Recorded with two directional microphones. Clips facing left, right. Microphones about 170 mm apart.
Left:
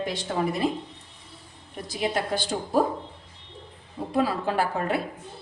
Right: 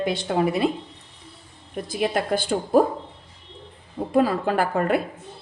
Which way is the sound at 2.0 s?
55° right (ahead or behind).